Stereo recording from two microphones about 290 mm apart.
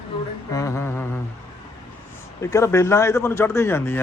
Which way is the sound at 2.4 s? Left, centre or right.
Centre.